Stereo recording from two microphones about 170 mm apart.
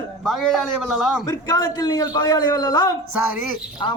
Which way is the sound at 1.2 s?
20° left (ahead or behind).